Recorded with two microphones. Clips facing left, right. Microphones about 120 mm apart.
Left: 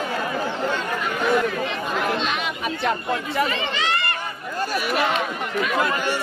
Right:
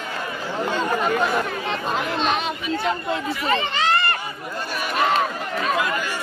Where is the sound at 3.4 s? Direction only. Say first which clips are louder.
Right 3 dB; 40° right (ahead or behind).